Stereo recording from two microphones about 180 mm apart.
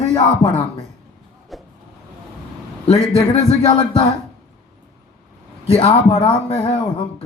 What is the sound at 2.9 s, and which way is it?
Speech, 35° left (ahead or behind).